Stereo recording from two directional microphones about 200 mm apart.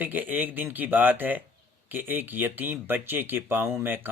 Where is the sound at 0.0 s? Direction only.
10° right (ahead or behind).